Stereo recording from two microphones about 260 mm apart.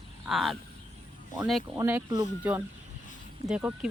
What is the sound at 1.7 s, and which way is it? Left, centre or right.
Speech, centre.